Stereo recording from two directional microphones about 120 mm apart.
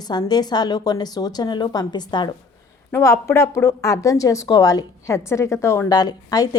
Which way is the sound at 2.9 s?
25° left (ahead or behind).